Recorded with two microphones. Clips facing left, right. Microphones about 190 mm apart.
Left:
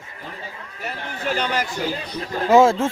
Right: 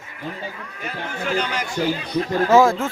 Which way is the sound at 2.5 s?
25° left (ahead or behind).